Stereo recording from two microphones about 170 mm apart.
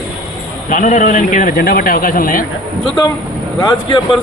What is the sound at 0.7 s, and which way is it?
Speech, 50° left (ahead or behind).